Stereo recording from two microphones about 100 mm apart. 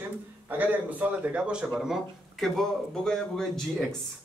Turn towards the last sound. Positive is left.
turn(degrees=5)  # may be behind; listen again after turning